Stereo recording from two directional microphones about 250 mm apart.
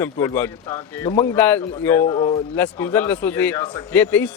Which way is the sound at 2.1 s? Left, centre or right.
Left.